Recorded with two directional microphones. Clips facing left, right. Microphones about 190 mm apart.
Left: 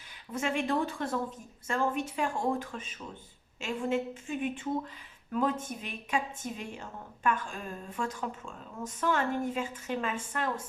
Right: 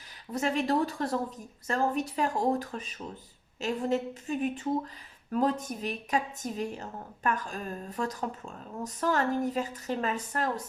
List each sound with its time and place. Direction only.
0.3 s speech: 40° right (ahead or behind)